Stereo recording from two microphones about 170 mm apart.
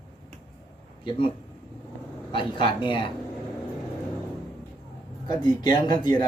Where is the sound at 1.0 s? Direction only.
30° left (ahead or behind).